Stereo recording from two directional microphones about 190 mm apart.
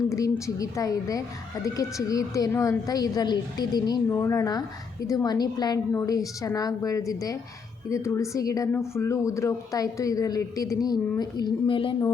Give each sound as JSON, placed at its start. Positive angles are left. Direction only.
{"t": 0.1, "sound": "a woman's voice", "side_deg": 15}